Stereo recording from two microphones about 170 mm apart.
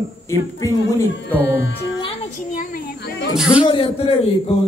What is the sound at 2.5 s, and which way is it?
Child singing, 60° left (ahead or behind).